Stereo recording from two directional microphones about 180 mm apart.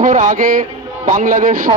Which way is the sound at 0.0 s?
45° right (ahead or behind).